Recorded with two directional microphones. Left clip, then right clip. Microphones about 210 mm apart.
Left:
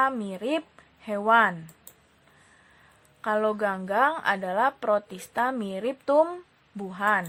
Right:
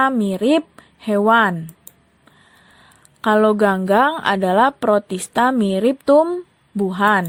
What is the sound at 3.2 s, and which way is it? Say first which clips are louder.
Speech: right 10 dB; 35° right (ahead or behind).